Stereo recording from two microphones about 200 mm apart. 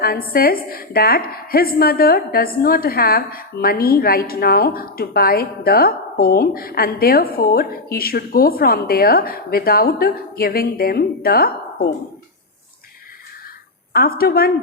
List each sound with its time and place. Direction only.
0.0 s a woman's voice: 45° left (ahead or behind)
13.9 s a woman's voice: 50° left (ahead or behind)